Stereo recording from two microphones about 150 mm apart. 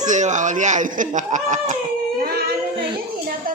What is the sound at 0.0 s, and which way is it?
Speech, 55° right (ahead or behind).